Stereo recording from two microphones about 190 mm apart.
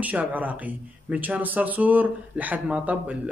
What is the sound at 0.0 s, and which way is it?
Speech, 10° right (ahead or behind).